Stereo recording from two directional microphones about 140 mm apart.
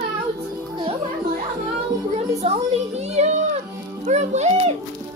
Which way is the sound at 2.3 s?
50° right (ahead or behind).